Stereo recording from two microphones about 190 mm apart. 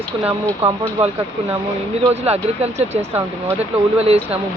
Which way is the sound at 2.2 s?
35° right (ahead or behind).